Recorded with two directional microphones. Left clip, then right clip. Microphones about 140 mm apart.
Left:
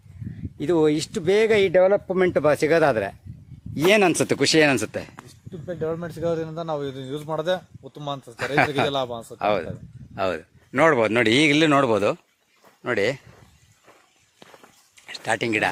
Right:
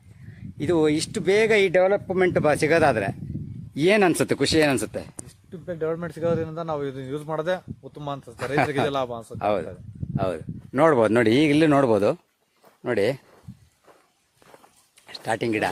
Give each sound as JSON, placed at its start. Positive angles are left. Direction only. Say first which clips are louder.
{"t": 0.6, "sound": "a man's voice", "louder": "left 1 dB", "side_deg": 0}
{"t": 5.5, "sound": "a man's voice", "louder": "even", "side_deg": -10}
{"t": 10.7, "sound": "speech", "louder": "left 1 dB", "side_deg": -20}
{"t": 10.9, "sound": "a man's voice", "louder": "right 1 dB", "side_deg": -45}
{"t": 11.3, "sound": "a man's voice", "louder": "left 1 dB", "side_deg": -30}
{"t": 15.0, "sound": "speech", "louder": "left 2 dB", "side_deg": -30}